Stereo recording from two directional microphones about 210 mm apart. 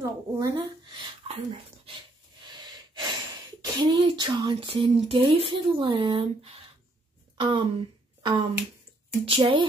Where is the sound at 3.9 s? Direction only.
20° right (ahead or behind).